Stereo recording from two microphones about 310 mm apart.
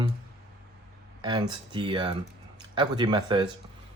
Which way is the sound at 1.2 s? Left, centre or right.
Centre.